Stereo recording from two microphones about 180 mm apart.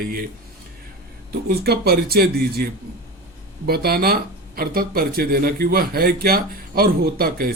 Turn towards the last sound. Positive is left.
turn(degrees=-55)  # may be behind; listen again after turning